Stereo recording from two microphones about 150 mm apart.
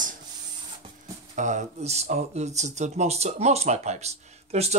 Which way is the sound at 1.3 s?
55° right (ahead or behind).